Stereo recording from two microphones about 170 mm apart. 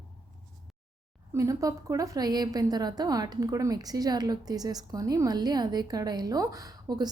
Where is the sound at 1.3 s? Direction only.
20° right (ahead or behind).